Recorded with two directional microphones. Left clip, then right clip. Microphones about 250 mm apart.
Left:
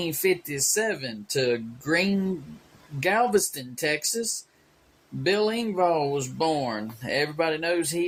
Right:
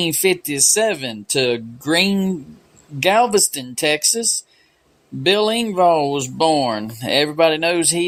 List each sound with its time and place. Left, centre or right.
0.0 s speech: right